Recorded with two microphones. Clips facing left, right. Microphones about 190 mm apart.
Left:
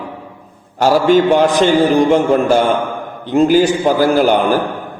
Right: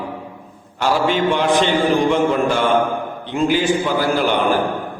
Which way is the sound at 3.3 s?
40° left (ahead or behind).